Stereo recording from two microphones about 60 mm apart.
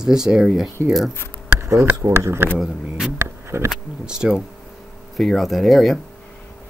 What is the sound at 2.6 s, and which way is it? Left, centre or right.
Speech, centre.